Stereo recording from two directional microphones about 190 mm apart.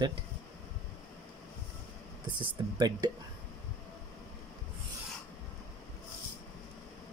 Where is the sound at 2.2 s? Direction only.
25° right (ahead or behind).